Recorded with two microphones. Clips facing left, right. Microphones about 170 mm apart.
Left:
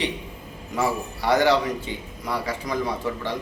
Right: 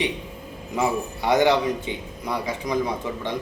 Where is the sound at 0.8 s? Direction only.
20° right (ahead or behind).